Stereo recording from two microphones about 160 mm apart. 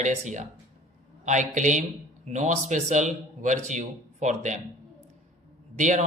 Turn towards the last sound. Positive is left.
turn(degrees=-50)  # may be behind; listen again after turning